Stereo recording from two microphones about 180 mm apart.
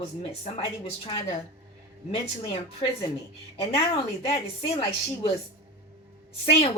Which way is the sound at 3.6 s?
30° left (ahead or behind).